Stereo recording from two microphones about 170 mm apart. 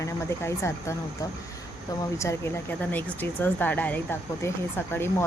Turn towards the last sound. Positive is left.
turn(degrees=15)  # may be behind; listen again after turning